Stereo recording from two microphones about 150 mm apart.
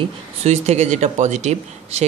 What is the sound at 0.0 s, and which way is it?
Speech, 45° right (ahead or behind).